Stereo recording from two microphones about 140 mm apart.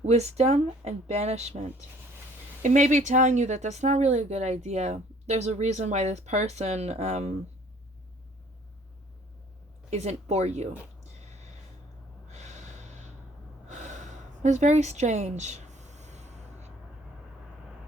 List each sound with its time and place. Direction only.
0.0 s speech: 50° right (ahead or behind)
2.6 s speech: 60° right (ahead or behind)
9.9 s speech: 50° right (ahead or behind)
12.3 s snort: 55° right (ahead or behind)
13.7 s a sound: 60° right (ahead or behind)